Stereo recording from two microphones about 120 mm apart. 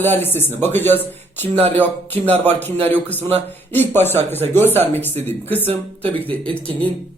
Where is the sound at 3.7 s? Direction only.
15° left (ahead or behind).